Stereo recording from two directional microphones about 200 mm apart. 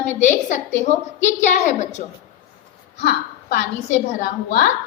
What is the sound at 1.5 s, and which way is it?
Speech, 35° left (ahead or behind).